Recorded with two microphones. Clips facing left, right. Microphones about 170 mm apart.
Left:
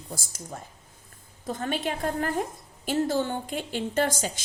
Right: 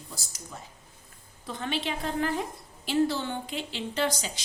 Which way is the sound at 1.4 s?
45° left (ahead or behind).